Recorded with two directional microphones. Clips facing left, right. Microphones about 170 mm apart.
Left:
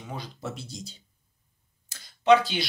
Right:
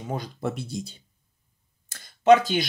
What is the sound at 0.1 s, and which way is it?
Speech, 50° right (ahead or behind).